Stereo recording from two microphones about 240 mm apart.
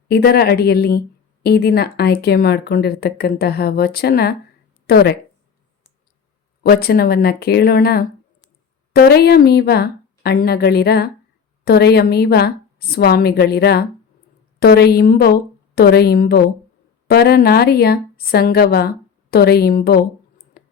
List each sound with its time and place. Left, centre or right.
0.1 s a woman's voice: left
6.6 s a woman's voice: left
20.6 s clicking: left